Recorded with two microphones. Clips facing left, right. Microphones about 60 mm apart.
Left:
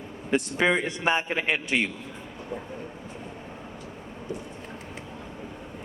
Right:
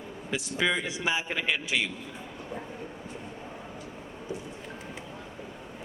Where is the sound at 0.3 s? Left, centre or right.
Left.